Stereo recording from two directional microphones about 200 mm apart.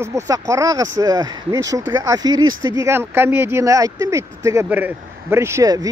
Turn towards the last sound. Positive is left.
turn(degrees=-20)  # may be behind; listen again after turning